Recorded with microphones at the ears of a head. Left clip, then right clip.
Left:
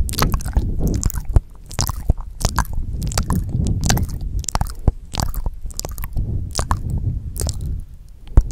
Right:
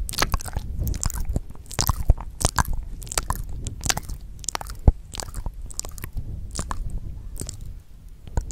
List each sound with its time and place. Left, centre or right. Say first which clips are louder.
0.0 s biting: left 3 dB; left
2.0 s chewing: left 1 dB; centre
2.8 s a sound: left 3 dB; left
5.1 s chewing: left 8 dB; left